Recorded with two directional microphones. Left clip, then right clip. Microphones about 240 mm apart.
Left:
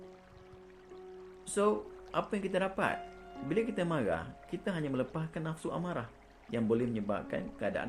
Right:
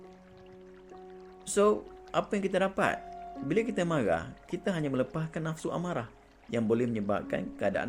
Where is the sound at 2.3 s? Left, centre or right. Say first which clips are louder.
Right 5 dB; right.